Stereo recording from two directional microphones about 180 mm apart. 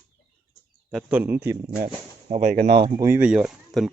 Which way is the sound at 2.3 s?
40° right (ahead or behind).